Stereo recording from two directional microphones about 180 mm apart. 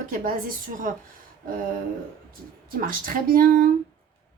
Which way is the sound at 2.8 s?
50° right (ahead or behind).